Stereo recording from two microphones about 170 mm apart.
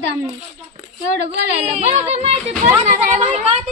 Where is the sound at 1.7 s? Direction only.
40° right (ahead or behind).